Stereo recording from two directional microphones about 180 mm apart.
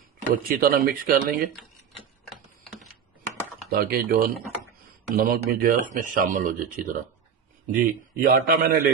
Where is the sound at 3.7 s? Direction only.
55° right (ahead or behind).